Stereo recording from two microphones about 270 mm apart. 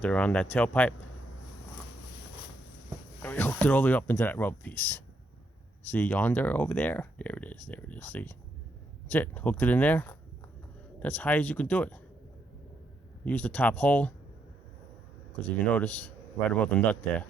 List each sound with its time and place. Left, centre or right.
0.0 s speech: centre
3.2 s speech: centre
13.2 s speech: centre
15.4 s speech: centre